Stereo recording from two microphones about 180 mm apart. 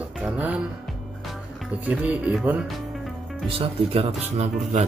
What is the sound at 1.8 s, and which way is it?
Speech, 5° right (ahead or behind).